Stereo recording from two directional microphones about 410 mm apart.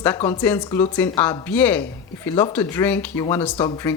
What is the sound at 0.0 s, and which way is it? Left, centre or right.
A man's voice, centre.